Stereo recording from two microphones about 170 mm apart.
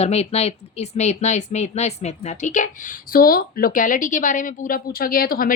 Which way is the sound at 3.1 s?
60° left (ahead or behind).